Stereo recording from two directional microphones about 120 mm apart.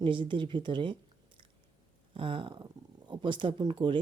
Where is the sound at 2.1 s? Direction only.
45° right (ahead or behind).